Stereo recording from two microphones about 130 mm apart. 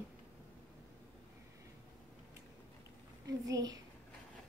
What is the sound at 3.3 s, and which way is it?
Speech, 30° right (ahead or behind).